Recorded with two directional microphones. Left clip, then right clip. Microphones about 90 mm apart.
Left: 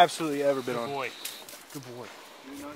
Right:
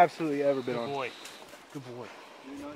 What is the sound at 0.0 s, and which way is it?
Speech, 35° left (ahead or behind).